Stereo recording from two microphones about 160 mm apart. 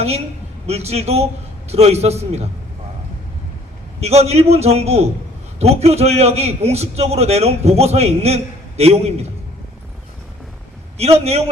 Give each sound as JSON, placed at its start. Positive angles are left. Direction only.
{"t": 0.7, "sound": "a man's voice", "side_deg": -40}
{"t": 4.0, "sound": "a man's voice", "side_deg": -40}
{"t": 10.9, "sound": "a man's voice", "side_deg": -40}